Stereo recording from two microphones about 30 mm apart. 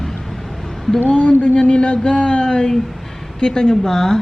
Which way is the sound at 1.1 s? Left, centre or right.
Left.